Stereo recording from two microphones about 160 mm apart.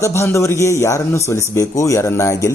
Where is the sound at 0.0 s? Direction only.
20° left (ahead or behind).